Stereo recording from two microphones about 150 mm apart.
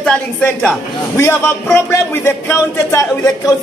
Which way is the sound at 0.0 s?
5° left (ahead or behind).